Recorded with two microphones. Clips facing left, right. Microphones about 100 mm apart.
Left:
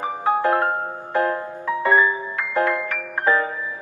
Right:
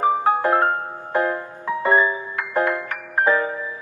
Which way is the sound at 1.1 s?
20° right (ahead or behind).